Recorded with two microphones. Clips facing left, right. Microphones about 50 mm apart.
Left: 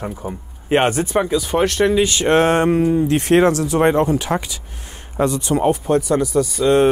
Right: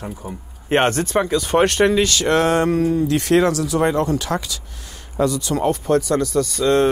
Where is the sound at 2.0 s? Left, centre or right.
Left.